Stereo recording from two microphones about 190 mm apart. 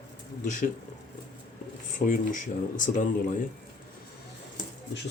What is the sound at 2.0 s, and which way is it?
Speech, 45° left (ahead or behind).